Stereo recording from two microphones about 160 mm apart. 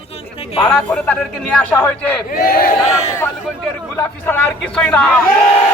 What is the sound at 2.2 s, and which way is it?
Speech, 65° left (ahead or behind).